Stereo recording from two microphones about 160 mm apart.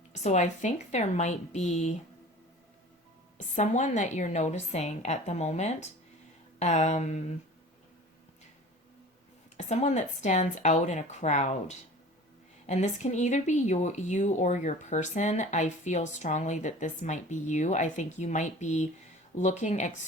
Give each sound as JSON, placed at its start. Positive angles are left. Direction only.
{"t": 0.1, "sound": "speech", "side_deg": 45}
{"t": 3.5, "sound": "speech", "side_deg": 45}
{"t": 9.6, "sound": "speech", "side_deg": 45}